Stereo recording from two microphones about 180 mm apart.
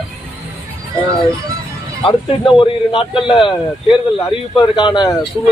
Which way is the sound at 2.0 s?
30° left (ahead or behind).